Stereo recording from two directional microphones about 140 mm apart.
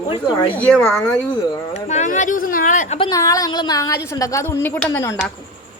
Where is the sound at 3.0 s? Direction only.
25° left (ahead or behind).